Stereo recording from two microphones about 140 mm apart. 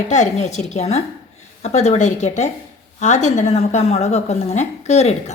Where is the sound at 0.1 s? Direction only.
55° left (ahead or behind).